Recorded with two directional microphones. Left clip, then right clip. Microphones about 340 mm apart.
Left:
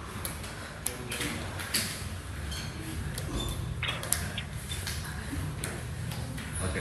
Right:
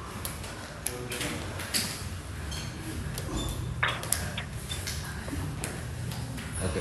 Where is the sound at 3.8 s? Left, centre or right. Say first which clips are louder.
Right 5 dB; right.